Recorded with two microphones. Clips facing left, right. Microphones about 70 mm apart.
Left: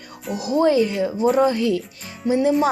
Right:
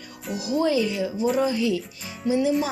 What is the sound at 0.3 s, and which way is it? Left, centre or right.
Speech, left.